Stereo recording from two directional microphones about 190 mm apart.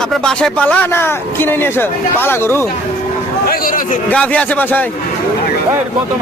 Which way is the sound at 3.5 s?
45° left (ahead or behind).